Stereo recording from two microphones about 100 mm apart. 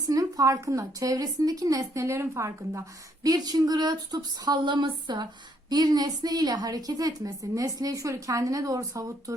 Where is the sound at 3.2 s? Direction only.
40° right (ahead or behind).